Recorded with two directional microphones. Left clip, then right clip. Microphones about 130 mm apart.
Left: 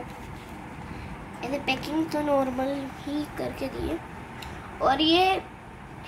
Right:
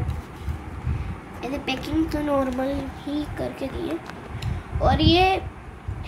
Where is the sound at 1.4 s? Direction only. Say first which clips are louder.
Even; 5° left (ahead or behind).